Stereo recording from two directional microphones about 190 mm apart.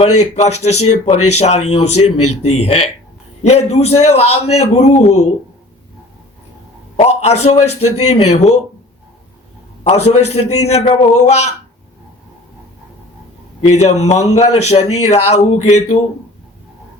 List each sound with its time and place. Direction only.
0.0 s speech: 35° left (ahead or behind)
6.9 s speech: 35° left (ahead or behind)
9.8 s speech: 35° left (ahead or behind)
13.7 s speech: 35° left (ahead or behind)